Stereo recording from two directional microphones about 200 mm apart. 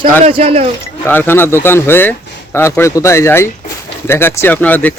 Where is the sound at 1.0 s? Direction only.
10° left (ahead or behind).